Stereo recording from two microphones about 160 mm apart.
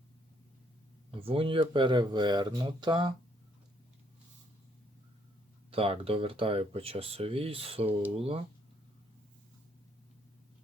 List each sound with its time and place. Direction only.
1.2 s speech: 35° right (ahead or behind)
5.7 s speech: 35° right (ahead or behind)